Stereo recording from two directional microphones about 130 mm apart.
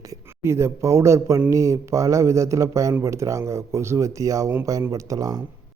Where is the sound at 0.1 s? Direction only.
20° right (ahead or behind).